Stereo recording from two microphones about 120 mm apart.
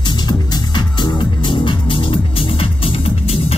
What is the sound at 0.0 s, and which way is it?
Music, 40° left (ahead or behind).